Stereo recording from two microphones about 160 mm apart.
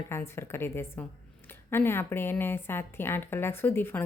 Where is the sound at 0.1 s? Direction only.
15° left (ahead or behind).